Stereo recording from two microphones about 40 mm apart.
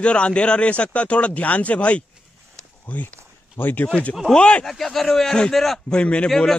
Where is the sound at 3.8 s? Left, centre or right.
Left.